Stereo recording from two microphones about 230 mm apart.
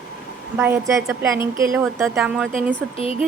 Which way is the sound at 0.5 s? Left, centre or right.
Centre.